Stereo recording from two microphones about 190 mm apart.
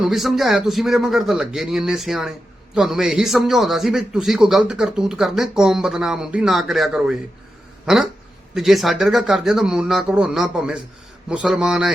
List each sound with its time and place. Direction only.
0.0 s a man's voice: centre (ahead or behind)